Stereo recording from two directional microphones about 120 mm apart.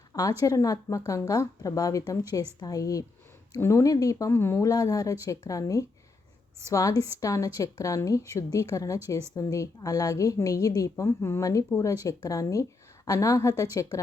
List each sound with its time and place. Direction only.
0.1 s a woman's voice: 30° left (ahead or behind)